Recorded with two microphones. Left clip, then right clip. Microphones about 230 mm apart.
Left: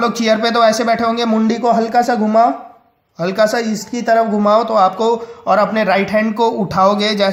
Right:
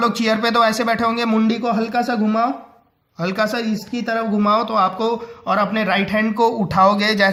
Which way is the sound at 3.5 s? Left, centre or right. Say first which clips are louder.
Left 5 dB; centre.